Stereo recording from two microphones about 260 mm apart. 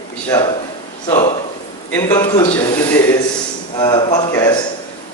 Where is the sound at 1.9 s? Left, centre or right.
Centre.